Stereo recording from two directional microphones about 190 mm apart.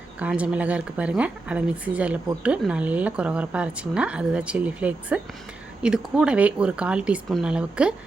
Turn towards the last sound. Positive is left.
turn(degrees=-5)  # may be behind; listen again after turning